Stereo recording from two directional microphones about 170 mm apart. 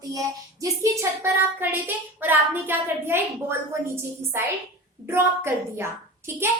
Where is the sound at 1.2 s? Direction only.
15° right (ahead or behind).